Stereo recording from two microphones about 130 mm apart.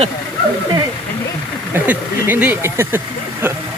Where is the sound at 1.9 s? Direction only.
15° right (ahead or behind).